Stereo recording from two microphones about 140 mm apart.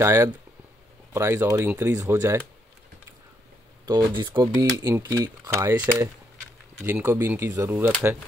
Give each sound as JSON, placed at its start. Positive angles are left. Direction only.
{"t": 0.0, "sound": "speech", "side_deg": -20}
{"t": 3.8, "sound": "speech", "side_deg": -30}